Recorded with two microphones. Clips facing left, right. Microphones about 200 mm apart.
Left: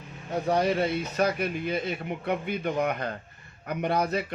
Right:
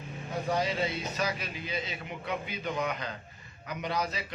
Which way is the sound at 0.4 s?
60° left (ahead or behind).